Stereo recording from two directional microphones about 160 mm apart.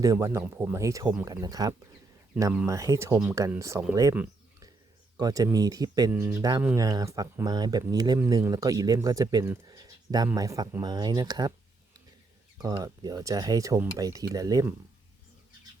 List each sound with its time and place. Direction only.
0.0 s speech: 20° right (ahead or behind)
5.1 s speech: 20° right (ahead or behind)
12.5 s speech: 25° right (ahead or behind)